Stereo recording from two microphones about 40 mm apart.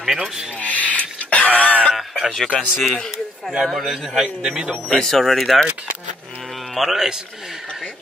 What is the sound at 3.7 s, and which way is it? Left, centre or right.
Speech, centre.